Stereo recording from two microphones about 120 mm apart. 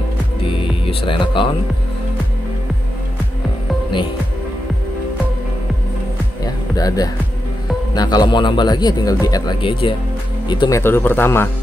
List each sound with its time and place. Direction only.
0.8 s speech: 45° left (ahead or behind)
6.4 s music: 30° left (ahead or behind)
7.9 s speech: 35° left (ahead or behind)
10.7 s speech: 20° left (ahead or behind)